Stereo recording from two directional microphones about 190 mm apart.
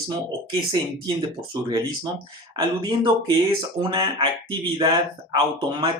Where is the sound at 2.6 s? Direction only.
20° right (ahead or behind).